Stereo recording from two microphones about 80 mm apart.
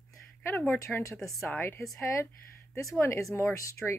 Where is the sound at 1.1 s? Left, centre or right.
Centre.